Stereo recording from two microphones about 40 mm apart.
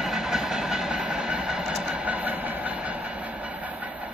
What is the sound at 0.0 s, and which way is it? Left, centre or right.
Vehicle, centre.